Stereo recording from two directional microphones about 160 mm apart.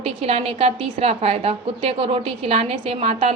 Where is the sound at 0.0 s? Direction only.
35° right (ahead or behind).